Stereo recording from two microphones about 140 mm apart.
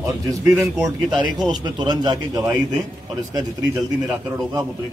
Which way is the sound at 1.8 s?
30° right (ahead or behind).